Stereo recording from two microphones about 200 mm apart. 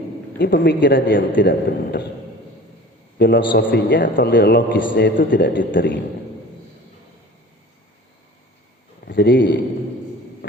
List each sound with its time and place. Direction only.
0.3 s a man's voice: 55° left (ahead or behind)
3.2 s a man's voice: 55° left (ahead or behind)
9.0 s a man's voice: 60° left (ahead or behind)